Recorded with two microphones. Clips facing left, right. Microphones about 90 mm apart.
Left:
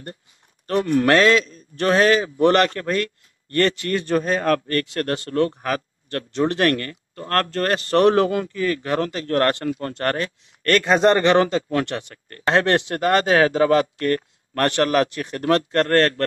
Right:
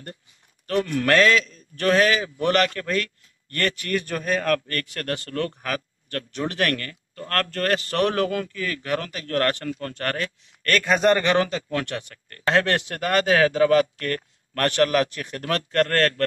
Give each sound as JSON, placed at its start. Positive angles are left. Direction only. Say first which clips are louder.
{"t": 0.7, "sound": "a man's voice", "louder": "left 4 dB", "side_deg": 25}